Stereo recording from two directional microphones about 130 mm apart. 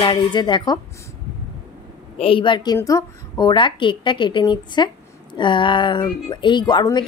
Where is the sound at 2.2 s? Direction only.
45° left (ahead or behind).